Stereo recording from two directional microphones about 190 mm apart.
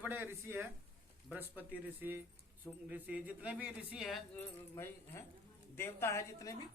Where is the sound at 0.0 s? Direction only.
10° right (ahead or behind).